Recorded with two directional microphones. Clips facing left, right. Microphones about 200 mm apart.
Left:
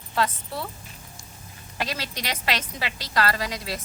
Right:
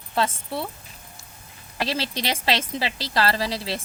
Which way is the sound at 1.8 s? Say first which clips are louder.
Right 4 dB; 30° right (ahead or behind).